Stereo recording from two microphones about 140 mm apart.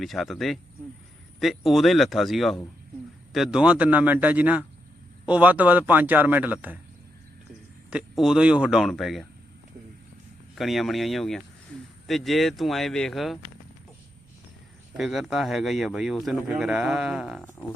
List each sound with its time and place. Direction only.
0.0 s a man's voice: centre (ahead or behind)
7.9 s speech: 5° right (ahead or behind)
10.5 s speech: centre (ahead or behind)
14.9 s speech: centre (ahead or behind)